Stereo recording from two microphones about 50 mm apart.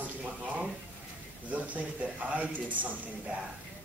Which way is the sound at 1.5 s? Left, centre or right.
Right.